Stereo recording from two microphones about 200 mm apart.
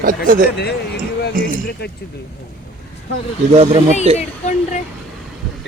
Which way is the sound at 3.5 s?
30° right (ahead or behind).